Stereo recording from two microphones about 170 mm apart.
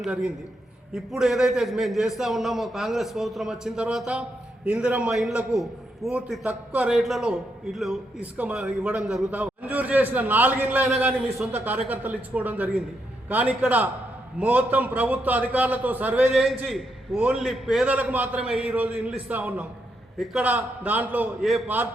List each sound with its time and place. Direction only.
0.0 s a man's voice: 5° right (ahead or behind)